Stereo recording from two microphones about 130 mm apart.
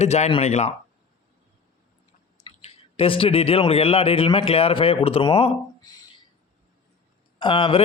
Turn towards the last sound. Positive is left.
turn(degrees=40)  # may be behind; listen again after turning